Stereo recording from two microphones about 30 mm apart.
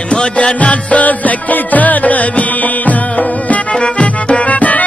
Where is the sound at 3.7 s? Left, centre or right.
Left.